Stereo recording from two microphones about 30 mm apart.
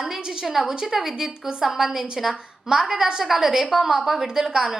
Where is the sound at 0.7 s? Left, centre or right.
Right.